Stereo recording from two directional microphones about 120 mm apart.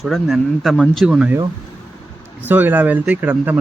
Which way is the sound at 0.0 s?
Centre (ahead or behind).